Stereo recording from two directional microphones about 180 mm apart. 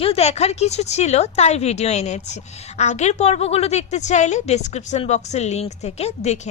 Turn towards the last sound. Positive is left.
turn(degrees=40)  # may be behind; listen again after turning